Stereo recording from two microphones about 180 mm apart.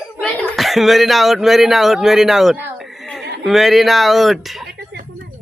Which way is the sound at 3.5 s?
Centre (ahead or behind).